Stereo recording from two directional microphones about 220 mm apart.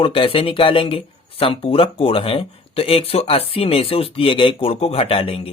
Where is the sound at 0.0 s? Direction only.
25° left (ahead or behind).